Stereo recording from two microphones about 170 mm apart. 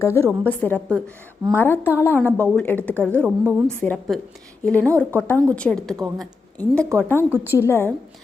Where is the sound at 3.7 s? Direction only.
10° left (ahead or behind).